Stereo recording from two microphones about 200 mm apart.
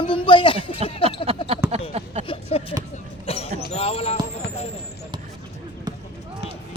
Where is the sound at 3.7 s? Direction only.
30° left (ahead or behind).